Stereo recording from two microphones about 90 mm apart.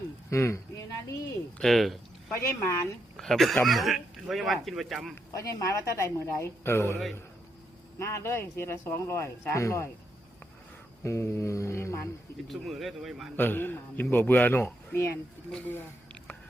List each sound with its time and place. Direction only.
0.3 s a woman's voice: 30° left (ahead or behind)
1.5 s speech: centre (ahead or behind)
2.3 s a woman's voice: 30° left (ahead or behind)
3.2 s speech: centre (ahead or behind)
5.4 s a woman's voice: 40° left (ahead or behind)
7.9 s a woman's voice: 30° left (ahead or behind)
11.0 s a woman's voice: 30° left (ahead or behind)
12.5 s speech: centre (ahead or behind)
13.3 s speech: 20° left (ahead or behind)
15.6 s a sound: 15° left (ahead or behind)